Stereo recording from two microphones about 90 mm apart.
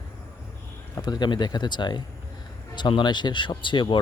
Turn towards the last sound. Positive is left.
turn(degrees=60)  # may be behind; listen again after turning